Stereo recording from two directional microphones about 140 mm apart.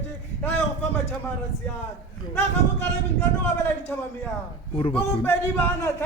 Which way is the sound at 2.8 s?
15° left (ahead or behind).